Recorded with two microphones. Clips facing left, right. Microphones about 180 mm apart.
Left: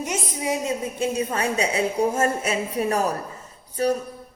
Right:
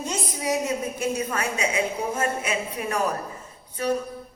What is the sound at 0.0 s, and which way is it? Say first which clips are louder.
A woman's voice: left 1 dB; 20° left (ahead or behind).